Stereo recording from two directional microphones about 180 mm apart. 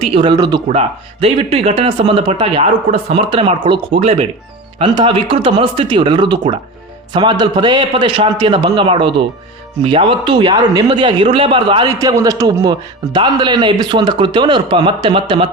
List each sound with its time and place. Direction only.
0.0 s a man's voice: 30° right (ahead or behind)
0.8 s a man's voice: 35° right (ahead or behind)
11.9 s a man's voice: 20° right (ahead or behind)